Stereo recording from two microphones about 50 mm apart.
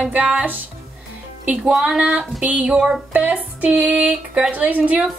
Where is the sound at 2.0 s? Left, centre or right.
Right.